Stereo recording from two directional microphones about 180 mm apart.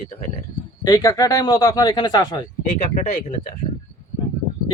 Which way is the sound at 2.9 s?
40° left (ahead or behind).